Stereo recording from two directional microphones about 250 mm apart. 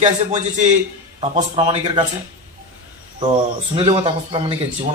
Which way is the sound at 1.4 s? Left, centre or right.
Centre.